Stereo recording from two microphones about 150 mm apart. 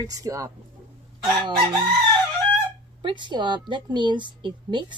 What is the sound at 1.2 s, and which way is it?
Speech, 35° right (ahead or behind).